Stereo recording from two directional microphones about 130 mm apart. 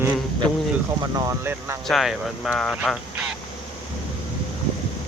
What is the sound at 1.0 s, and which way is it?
Speech, 30° right (ahead or behind).